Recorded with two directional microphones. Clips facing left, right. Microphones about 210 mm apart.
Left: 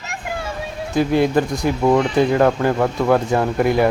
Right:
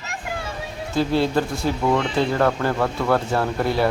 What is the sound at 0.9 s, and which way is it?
Speech, 15° left (ahead or behind).